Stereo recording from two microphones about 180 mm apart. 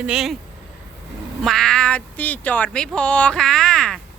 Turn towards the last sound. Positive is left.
turn(degrees=5)  # may be behind; listen again after turning